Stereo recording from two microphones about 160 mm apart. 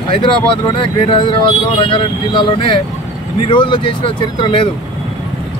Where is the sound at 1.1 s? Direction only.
30° left (ahead or behind).